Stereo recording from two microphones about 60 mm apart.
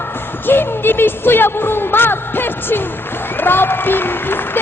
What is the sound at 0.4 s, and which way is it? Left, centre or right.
A man's voice, left.